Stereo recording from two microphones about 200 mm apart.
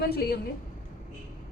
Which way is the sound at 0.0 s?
50° left (ahead or behind).